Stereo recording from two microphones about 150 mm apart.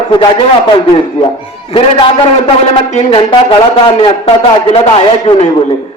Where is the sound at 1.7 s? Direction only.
35° left (ahead or behind).